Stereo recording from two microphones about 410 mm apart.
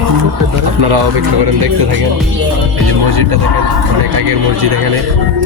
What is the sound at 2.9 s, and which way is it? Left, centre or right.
Speech, right.